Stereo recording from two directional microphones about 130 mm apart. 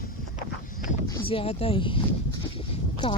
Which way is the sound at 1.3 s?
50° left (ahead or behind).